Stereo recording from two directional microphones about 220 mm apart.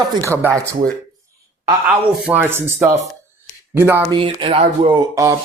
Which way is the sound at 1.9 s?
10° right (ahead or behind).